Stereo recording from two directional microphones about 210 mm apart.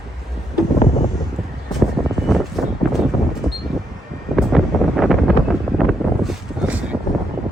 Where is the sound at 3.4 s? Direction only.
5° right (ahead or behind).